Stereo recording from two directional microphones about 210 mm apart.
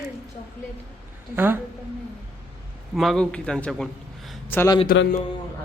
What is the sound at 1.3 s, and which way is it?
Speech, 10° right (ahead or behind).